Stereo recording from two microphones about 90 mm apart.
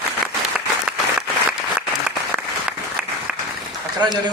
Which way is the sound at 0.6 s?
10° right (ahead or behind).